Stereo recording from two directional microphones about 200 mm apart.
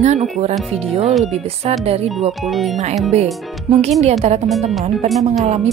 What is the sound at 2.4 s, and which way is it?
Speech, centre (ahead or behind).